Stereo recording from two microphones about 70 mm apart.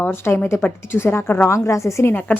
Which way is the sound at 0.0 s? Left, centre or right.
Left.